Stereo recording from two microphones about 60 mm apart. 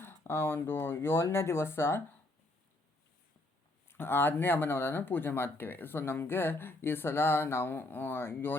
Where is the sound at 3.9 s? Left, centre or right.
Left.